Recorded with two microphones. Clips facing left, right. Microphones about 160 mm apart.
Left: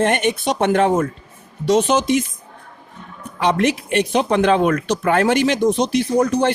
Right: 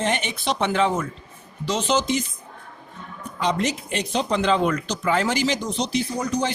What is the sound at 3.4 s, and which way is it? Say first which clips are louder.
Speech: left 6 dB; 60° left (ahead or behind).